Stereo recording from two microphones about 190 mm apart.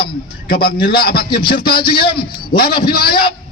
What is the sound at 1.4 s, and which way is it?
Speech, 25° left (ahead or behind).